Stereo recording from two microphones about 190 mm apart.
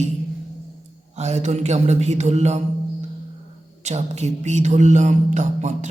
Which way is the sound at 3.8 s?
35° right (ahead or behind).